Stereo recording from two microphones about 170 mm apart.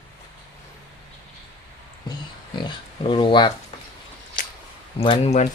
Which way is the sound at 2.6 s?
30° left (ahead or behind).